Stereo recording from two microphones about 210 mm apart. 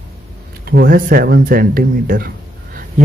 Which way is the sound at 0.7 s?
45° right (ahead or behind).